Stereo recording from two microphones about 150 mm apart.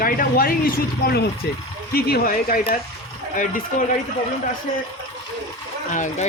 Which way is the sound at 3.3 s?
60° left (ahead or behind).